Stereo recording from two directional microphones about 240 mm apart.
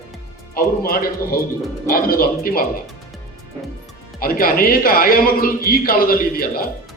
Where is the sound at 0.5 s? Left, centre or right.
Left.